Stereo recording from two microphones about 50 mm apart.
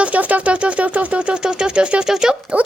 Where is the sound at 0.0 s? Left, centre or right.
Right.